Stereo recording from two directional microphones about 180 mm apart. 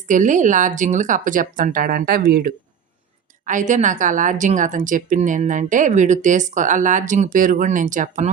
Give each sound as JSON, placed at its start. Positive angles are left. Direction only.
{"t": 0.1, "sound": "speech", "side_deg": -45}
{"t": 3.4, "sound": "speech", "side_deg": -45}